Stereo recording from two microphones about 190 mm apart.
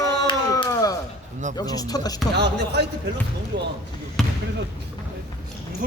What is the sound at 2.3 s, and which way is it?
Speech, 60° right (ahead or behind).